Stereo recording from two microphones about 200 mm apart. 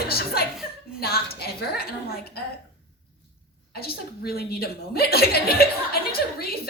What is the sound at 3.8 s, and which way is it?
A woman's voice, 50° left (ahead or behind).